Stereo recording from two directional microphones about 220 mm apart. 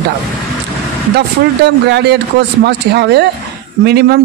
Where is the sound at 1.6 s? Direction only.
50° right (ahead or behind).